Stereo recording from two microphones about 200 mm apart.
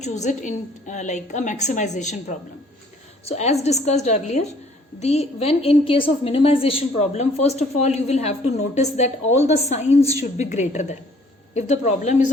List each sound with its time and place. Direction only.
0.0 s a woman's voice: 35° left (ahead or behind)
3.2 s a woman's voice: 35° left (ahead or behind)